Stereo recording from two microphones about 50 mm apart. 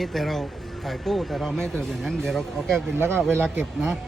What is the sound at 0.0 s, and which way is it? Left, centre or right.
Speech, centre.